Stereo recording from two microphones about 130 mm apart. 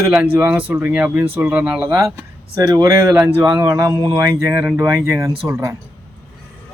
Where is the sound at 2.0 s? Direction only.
25° right (ahead or behind).